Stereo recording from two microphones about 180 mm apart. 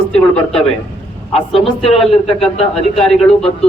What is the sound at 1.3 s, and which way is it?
Speech, 30° left (ahead or behind).